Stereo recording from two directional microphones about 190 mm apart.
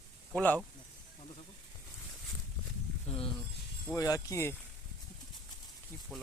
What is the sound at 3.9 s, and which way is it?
Speech, 20° left (ahead or behind).